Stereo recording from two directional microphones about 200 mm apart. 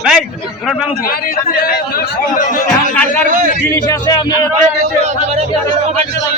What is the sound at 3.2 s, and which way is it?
Speech, 45° right (ahead or behind).